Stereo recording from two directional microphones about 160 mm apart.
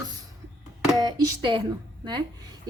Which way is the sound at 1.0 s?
25° right (ahead or behind).